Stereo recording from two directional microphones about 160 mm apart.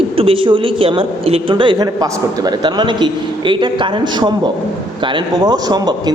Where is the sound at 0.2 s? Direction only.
35° right (ahead or behind).